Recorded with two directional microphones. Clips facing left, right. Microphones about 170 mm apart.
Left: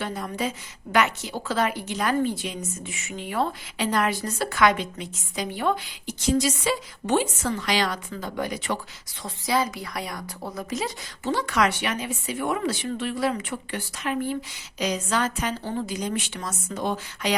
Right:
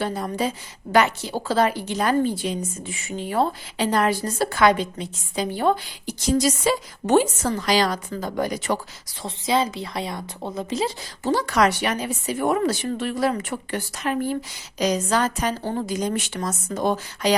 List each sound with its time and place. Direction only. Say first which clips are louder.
0.0 s a woman's voice: right 4 dB; 35° right (ahead or behind)
9.2 s a woman's voice: right 3 dB; 25° right (ahead or behind); by 17.3 s 40° right (ahead or behind)